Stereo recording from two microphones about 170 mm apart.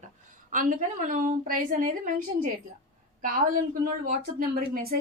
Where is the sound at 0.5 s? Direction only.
50° right (ahead or behind).